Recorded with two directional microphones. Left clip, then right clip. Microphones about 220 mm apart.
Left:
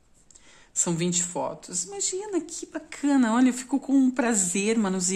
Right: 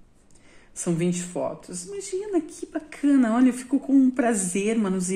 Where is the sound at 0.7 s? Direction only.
45° left (ahead or behind).